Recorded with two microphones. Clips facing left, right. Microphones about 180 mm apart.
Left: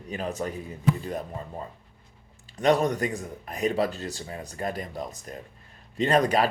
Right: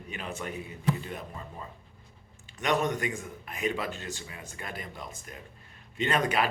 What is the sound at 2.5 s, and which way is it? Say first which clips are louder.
Speech: left 6 dB; 35° left (ahead or behind).